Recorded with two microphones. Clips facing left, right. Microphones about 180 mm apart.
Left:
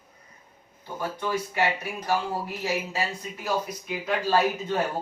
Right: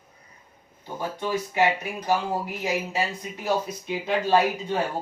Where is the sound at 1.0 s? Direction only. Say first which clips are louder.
Right 1 dB; 20° right (ahead or behind).